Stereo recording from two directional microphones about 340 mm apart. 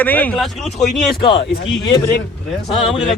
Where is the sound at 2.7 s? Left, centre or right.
Centre.